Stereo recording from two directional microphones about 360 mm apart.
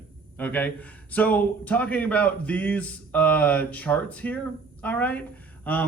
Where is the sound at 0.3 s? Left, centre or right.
Centre.